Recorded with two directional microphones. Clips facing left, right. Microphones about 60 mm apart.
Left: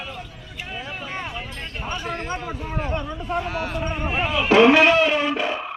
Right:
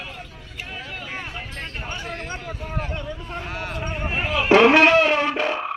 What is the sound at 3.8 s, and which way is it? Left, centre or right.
Speech, centre.